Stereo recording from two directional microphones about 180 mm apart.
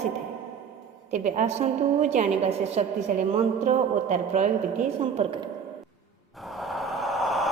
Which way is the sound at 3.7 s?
45° right (ahead or behind).